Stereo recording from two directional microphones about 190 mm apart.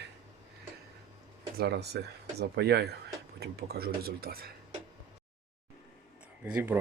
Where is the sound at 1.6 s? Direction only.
60° right (ahead or behind).